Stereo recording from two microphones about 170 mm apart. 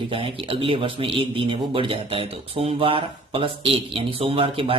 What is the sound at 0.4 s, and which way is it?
Speech, 30° right (ahead or behind).